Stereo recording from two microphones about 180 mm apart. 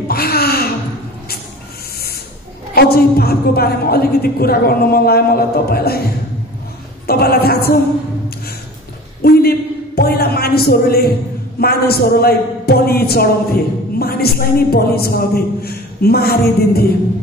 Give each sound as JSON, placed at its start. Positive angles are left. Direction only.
{"t": 0.1, "sound": "a sound", "side_deg": 60}
{"t": 2.7, "sound": "a man's voice", "side_deg": 60}
{"t": 7.1, "sound": "a man's voice", "side_deg": 60}
{"t": 9.2, "sound": "a man's voice", "side_deg": 60}